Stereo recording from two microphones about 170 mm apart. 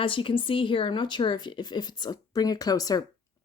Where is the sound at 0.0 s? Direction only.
30° left (ahead or behind).